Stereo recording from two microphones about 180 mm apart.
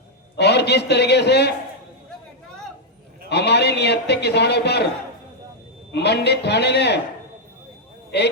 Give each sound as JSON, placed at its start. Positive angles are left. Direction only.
{"t": 0.3, "sound": "a man's voice", "side_deg": 70}
{"t": 3.2, "sound": "a man's voice", "side_deg": 70}
{"t": 5.9, "sound": "a man's voice", "side_deg": 70}